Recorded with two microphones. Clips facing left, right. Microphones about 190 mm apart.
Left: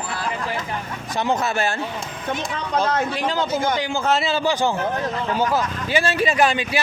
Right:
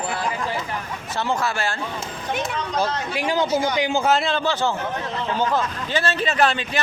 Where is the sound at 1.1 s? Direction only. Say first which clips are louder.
Left 2 dB; 20° left (ahead or behind).